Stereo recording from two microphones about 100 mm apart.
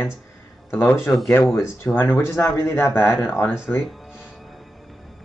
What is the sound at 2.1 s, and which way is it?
Speech, 25° left (ahead or behind).